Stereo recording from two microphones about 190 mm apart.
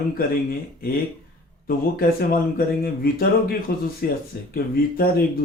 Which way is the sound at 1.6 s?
50° left (ahead or behind).